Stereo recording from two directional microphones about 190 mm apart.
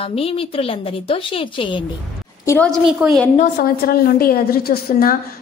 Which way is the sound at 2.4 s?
10° left (ahead or behind).